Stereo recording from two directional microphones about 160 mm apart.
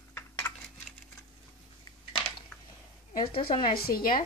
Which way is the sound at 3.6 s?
70° left (ahead or behind).